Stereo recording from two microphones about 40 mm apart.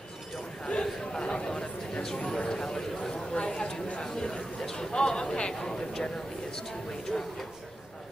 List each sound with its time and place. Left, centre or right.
0.7 s speech: left